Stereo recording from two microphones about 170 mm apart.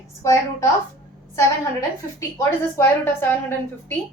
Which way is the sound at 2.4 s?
15° left (ahead or behind).